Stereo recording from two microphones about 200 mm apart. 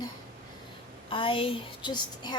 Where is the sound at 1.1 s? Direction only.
25° left (ahead or behind).